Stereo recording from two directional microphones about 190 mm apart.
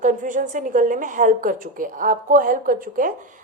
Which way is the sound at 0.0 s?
45° right (ahead or behind).